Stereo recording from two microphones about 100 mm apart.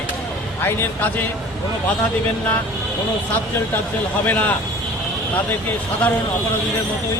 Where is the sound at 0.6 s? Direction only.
20° left (ahead or behind).